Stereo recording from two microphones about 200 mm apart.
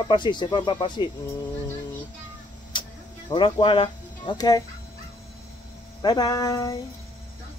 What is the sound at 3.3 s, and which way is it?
Speech, 25° left (ahead or behind).